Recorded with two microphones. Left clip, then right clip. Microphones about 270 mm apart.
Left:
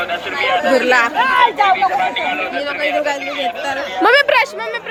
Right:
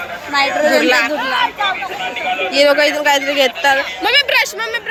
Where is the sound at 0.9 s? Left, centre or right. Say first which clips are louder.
Even; centre.